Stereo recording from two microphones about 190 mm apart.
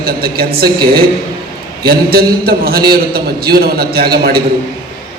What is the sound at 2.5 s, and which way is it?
A man's voice, 55° right (ahead or behind).